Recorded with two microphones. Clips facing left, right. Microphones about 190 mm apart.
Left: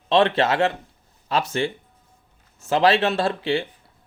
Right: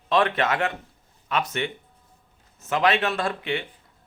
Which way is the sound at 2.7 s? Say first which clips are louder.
Left 4 dB; 30° left (ahead or behind).